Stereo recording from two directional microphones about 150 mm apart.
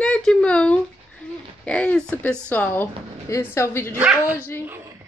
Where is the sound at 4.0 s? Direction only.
10° right (ahead or behind).